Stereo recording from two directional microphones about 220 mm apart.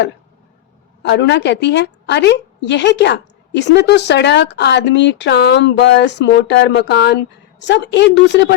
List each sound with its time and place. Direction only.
1.0 s a woman's voice: 55° left (ahead or behind)